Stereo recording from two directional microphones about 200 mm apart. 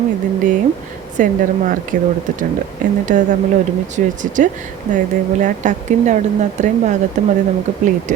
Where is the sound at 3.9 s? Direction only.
40° right (ahead or behind).